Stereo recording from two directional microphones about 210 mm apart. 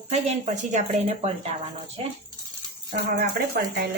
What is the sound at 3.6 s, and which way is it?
Speech, 50° right (ahead or behind).